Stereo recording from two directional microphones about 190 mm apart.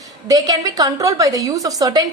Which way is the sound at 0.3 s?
20° right (ahead or behind).